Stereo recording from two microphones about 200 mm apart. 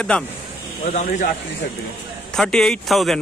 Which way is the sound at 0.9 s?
40° left (ahead or behind).